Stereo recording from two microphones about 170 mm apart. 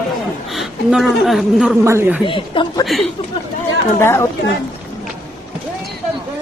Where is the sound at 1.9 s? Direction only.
15° right (ahead or behind).